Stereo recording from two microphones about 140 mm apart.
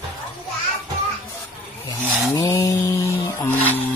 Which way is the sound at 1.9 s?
25° left (ahead or behind).